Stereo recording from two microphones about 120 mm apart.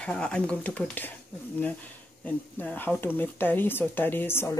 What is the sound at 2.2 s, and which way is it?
Speech, 15° left (ahead or behind).